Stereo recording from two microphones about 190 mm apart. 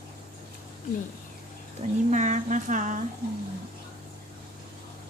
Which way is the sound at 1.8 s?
40° right (ahead or behind).